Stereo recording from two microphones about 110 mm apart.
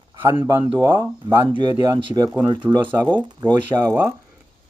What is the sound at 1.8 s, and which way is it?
Speech, 40° right (ahead or behind).